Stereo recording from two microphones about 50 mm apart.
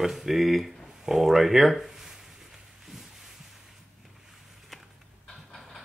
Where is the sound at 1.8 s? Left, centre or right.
Centre.